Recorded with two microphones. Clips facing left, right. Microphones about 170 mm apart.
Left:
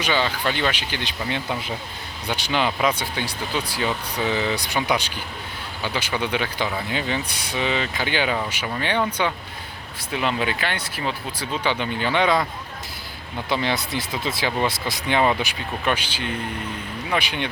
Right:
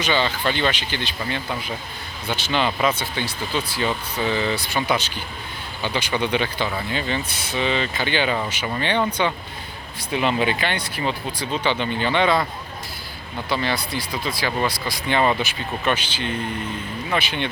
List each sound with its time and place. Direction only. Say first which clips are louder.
0.0 s speech: right 1 dB; 10° left (ahead or behind)
13.5 s speech: even; 20° left (ahead or behind)